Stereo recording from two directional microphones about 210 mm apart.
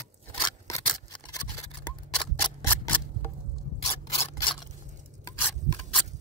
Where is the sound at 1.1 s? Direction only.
20° left (ahead or behind).